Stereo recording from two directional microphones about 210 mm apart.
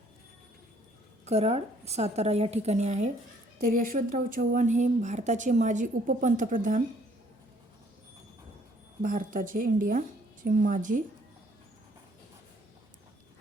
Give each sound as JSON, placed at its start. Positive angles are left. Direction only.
{"t": 1.2, "sound": "a woman's voice", "side_deg": -30}
{"t": 9.0, "sound": "a woman's voice", "side_deg": -40}